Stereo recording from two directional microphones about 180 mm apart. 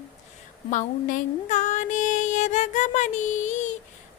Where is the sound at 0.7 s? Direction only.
45° left (ahead or behind).